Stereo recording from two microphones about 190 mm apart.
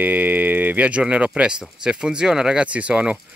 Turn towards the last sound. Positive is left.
turn(degrees=-5)  # may be behind; listen again after turning